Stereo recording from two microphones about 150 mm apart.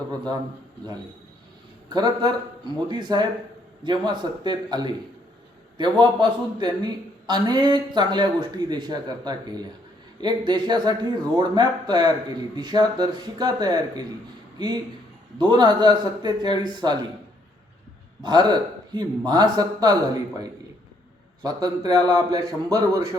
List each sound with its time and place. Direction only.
1.9 s a man's voice: 25° right (ahead or behind)
18.2 s a man's voice: 30° right (ahead or behind)